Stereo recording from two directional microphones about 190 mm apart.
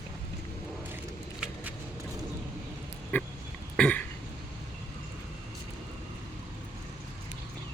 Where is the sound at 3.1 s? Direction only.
10° left (ahead or behind).